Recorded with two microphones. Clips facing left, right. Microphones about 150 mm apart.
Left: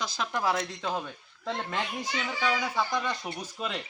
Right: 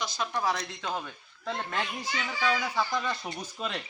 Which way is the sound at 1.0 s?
20° left (ahead or behind).